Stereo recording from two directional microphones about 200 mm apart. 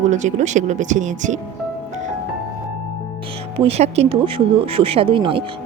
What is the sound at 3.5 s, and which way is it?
Speech, 30° right (ahead or behind).